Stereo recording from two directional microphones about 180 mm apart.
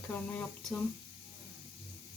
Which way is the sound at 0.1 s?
5° left (ahead or behind).